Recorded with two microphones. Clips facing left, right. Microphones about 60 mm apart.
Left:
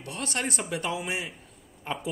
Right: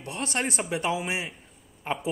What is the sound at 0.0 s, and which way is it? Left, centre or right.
Speech, right.